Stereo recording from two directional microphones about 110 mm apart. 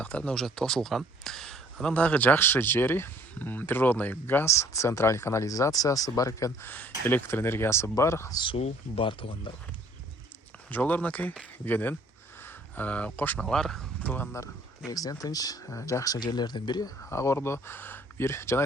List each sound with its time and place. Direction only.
0.0 s speech: 10° left (ahead or behind); by 6.7 s 30° left (ahead or behind)
6.7 s speech: 15° left (ahead or behind)
8.5 s speech: 60° left (ahead or behind)
10.7 s speech: 15° left (ahead or behind)
14.0 s speech: 15° left (ahead or behind)
14.8 s speech: 35° left (ahead or behind)